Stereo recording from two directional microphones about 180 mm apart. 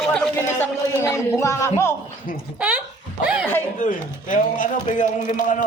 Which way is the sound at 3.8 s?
45° left (ahead or behind).